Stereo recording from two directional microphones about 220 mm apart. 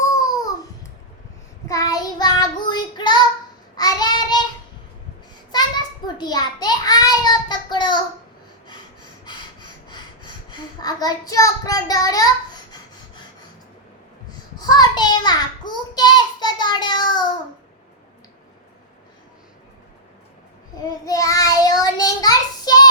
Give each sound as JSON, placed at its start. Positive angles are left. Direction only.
{"t": 0.1, "sound": "babbling", "side_deg": 15}
{"t": 1.6, "sound": "child singing", "side_deg": 15}
{"t": 5.5, "sound": "a sound", "side_deg": 20}
{"t": 9.2, "sound": "a sound", "side_deg": 20}
{"t": 14.6, "sound": "child singing", "side_deg": 20}
{"t": 21.0, "sound": "child singing", "side_deg": 15}